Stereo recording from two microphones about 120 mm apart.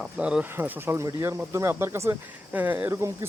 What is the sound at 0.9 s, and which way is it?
Speech, 25° right (ahead or behind).